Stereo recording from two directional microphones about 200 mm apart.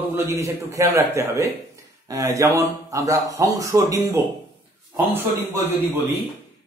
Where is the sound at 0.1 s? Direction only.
15° right (ahead or behind).